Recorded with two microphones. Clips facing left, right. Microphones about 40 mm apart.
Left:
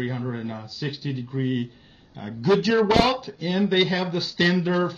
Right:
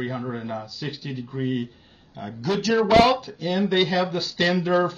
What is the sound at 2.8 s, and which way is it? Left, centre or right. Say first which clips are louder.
Speech: right 3 dB; centre.